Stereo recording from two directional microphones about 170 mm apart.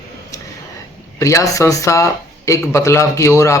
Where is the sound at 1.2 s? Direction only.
20° left (ahead or behind).